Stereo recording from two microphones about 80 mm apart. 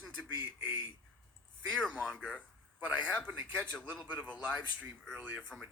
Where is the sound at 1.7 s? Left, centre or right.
Centre.